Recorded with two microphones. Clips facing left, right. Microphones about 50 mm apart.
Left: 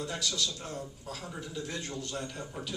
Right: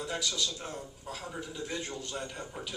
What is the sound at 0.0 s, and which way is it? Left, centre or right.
A man's voice, centre.